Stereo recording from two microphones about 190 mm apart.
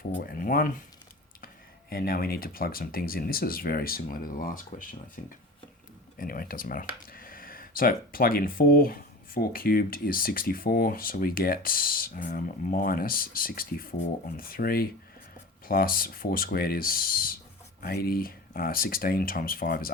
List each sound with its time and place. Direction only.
0.2 s speech: 50° left (ahead or behind)
1.9 s speech: 50° left (ahead or behind)